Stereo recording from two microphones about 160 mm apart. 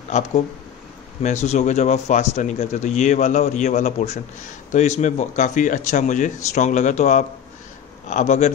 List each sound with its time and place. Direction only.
1.2 s speech: 45° left (ahead or behind)